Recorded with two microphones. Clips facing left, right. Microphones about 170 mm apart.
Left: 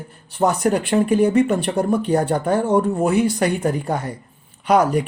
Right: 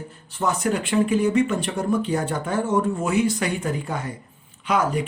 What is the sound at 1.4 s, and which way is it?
Speech, 60° left (ahead or behind).